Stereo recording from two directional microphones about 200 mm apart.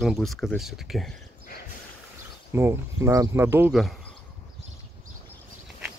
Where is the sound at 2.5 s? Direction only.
10° right (ahead or behind).